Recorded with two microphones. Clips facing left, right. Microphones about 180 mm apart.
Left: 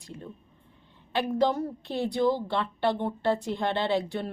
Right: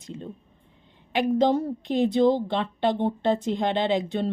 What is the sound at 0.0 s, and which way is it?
A woman's voice, 20° right (ahead or behind).